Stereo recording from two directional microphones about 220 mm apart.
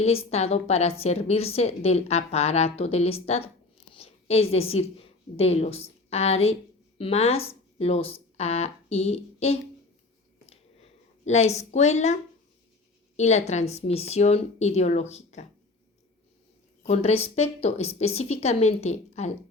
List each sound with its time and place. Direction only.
0.0 s a woman's voice: 30° left (ahead or behind)
11.3 s speech: 30° left (ahead or behind)
16.8 s a woman's voice: 30° left (ahead or behind)